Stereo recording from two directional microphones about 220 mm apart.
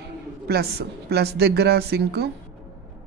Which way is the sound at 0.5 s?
45° right (ahead or behind).